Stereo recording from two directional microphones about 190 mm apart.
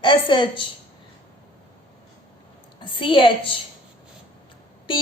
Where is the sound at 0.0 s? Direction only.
25° left (ahead or behind).